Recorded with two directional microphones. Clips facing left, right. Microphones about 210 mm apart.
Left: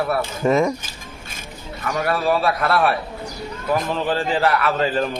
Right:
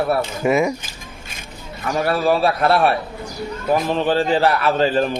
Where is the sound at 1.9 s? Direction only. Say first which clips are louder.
Right 2 dB; 30° right (ahead or behind).